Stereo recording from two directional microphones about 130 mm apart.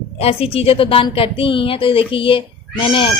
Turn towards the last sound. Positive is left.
turn(degrees=40)  # may be behind; listen again after turning